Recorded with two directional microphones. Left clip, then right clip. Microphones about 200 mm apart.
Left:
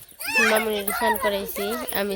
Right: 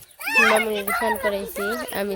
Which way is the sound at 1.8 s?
Centre (ahead or behind).